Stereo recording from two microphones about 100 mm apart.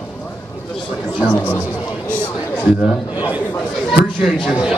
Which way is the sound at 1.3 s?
15° left (ahead or behind).